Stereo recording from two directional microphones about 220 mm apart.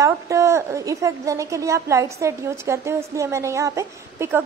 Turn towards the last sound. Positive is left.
turn(degrees=-10)  # may be behind; listen again after turning